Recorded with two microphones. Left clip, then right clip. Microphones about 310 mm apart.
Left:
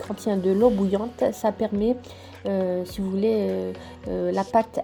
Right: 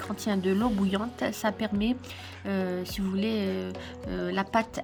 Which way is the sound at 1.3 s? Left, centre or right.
Centre.